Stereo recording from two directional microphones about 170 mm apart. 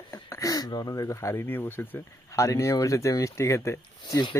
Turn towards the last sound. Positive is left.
turn(degrees=25)  # may be behind; listen again after turning